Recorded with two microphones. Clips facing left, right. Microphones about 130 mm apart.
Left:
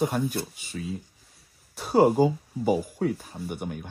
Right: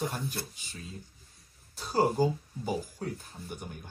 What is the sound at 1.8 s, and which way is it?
Speech, 65° left (ahead or behind).